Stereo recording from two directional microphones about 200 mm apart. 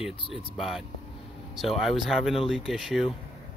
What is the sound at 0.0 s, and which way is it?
Speech, centre (ahead or behind).